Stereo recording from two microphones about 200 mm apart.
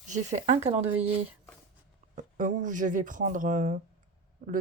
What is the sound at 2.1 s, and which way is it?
Speech, 40° right (ahead or behind).